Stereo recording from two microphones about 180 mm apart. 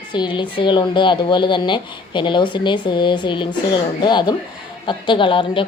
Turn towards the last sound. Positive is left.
turn(degrees=30)  # may be behind; listen again after turning